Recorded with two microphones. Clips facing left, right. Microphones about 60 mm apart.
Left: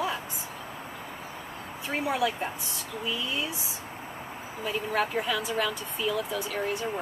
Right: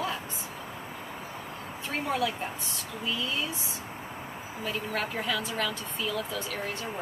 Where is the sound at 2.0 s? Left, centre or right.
Centre.